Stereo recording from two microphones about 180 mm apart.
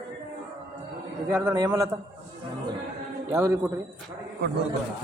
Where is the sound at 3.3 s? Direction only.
15° right (ahead or behind).